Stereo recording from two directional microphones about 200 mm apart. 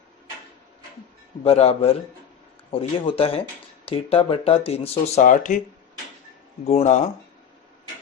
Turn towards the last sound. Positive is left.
turn(degrees=35)  # may be behind; listen again after turning